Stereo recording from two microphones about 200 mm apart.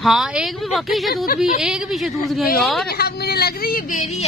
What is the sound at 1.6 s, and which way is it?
A woman's voice, 5° right (ahead or behind).